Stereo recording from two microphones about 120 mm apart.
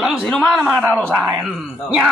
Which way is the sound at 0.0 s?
Centre (ahead or behind).